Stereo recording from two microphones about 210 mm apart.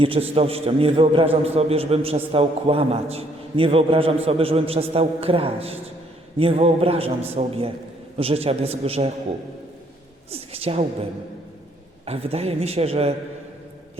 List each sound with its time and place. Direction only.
0.0 s a man's voice: 25° right (ahead or behind)
10.3 s a woman's voice: 25° right (ahead or behind)
12.0 s a man's voice: 30° right (ahead or behind)